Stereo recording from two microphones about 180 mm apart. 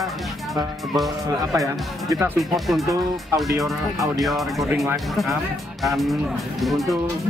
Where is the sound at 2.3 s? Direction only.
Centre (ahead or behind).